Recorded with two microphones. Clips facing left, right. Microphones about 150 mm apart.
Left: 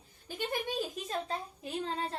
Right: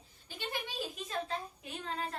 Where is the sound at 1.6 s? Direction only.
30° left (ahead or behind).